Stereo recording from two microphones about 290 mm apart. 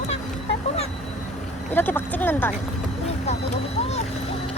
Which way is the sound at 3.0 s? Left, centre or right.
Left.